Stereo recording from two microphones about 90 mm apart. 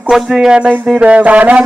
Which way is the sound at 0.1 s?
5° right (ahead or behind).